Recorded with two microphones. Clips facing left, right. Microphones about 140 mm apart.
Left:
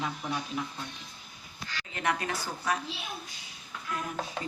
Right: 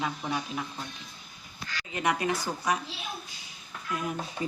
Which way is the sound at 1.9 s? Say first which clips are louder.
Right 3 dB; 15° right (ahead or behind).